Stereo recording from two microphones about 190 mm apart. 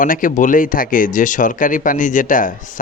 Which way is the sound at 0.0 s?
45° left (ahead or behind).